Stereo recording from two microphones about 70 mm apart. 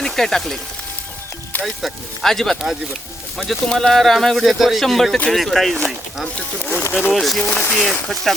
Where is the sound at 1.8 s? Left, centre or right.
Centre.